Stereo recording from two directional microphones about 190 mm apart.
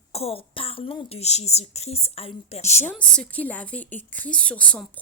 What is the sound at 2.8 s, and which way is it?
Speech, 5° left (ahead or behind).